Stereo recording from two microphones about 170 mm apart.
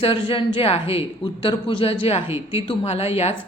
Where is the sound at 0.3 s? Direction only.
35° left (ahead or behind).